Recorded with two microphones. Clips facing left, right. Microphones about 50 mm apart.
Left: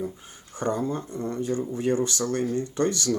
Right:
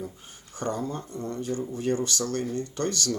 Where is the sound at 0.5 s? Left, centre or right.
Left.